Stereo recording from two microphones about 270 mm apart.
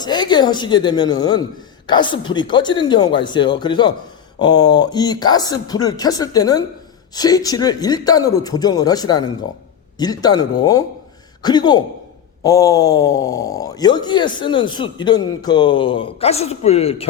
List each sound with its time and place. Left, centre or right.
0.0 s speech: centre